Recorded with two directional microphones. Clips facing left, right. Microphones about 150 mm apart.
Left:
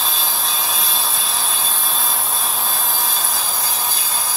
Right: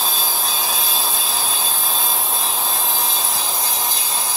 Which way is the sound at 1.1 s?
30° right (ahead or behind).